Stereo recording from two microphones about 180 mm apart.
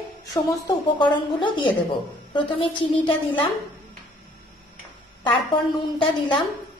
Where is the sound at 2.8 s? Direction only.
25° left (ahead or behind).